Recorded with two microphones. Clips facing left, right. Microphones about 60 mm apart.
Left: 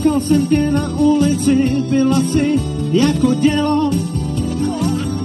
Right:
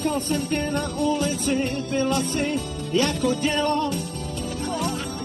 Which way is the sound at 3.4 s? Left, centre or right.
Left.